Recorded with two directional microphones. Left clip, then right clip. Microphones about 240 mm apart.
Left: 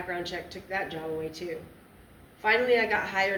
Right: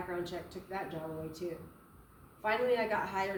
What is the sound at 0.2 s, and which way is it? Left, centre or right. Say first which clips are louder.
Speech: left 5 dB; right.